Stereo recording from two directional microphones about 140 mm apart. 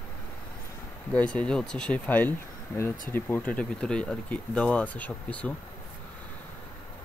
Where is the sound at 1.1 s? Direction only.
10° left (ahead or behind).